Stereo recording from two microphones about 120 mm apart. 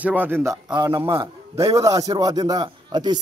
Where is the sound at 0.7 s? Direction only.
35° right (ahead or behind).